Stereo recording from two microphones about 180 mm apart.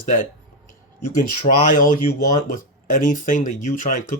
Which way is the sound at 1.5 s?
45° left (ahead or behind).